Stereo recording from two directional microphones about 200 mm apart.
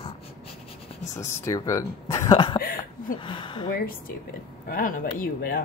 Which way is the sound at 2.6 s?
45° left (ahead or behind).